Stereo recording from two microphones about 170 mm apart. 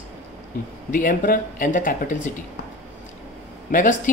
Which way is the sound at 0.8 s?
50° left (ahead or behind).